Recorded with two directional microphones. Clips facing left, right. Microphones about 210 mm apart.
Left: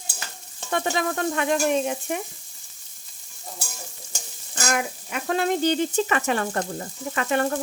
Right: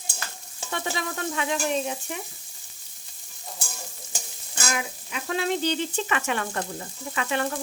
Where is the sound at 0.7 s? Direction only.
50° left (ahead or behind).